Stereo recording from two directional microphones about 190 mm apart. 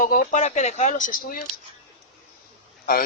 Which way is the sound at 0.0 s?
45° left (ahead or behind).